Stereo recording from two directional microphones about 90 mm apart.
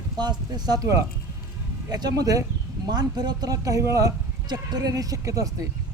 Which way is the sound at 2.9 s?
50° right (ahead or behind).